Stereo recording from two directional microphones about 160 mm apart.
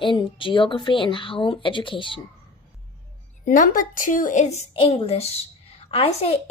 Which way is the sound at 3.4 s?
60° left (ahead or behind).